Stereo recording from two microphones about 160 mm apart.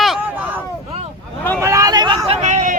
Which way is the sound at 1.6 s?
20° right (ahead or behind).